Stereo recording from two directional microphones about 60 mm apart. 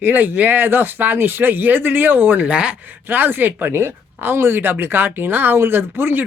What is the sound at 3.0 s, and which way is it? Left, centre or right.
Speech, right.